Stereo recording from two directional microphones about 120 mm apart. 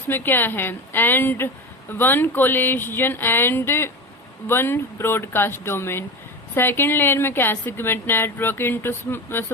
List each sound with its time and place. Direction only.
0.1 s a woman's voice: 15° left (ahead or behind)